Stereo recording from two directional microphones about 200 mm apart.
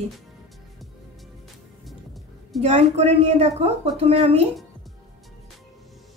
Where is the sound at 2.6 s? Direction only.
35° right (ahead or behind).